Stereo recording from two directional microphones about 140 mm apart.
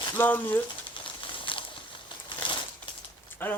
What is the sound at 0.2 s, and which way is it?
Speech, 15° left (ahead or behind).